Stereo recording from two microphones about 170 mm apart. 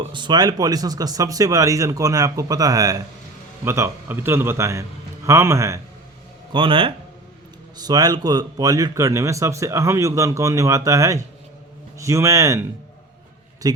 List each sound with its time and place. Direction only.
0.0 s a man's voice: 30° right (ahead or behind)
6.5 s a man's voice: 30° right (ahead or behind)
13.6 s speech: 20° right (ahead or behind)